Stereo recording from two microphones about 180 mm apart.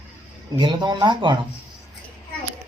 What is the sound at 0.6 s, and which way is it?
Speech, 25° right (ahead or behind).